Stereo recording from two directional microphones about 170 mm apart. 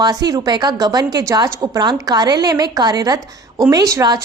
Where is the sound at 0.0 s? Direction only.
25° right (ahead or behind).